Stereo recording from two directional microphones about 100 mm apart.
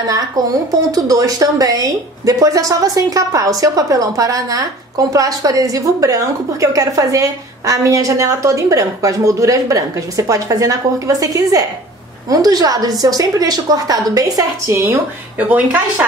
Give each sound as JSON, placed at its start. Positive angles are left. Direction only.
{"t": 0.7, "sound": "a woman's voice", "side_deg": -40}
{"t": 14.7, "sound": "a woman's voice", "side_deg": -25}